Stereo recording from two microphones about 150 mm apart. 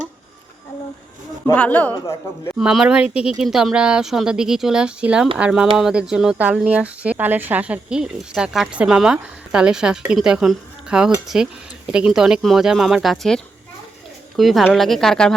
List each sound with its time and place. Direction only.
1.5 s speech: 10° left (ahead or behind)
2.6 s speech: 5° right (ahead or behind)